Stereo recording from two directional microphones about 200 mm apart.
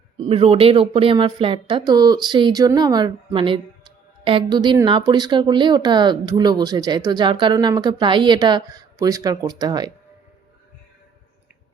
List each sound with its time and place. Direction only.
0.3 s speech: 30° right (ahead or behind)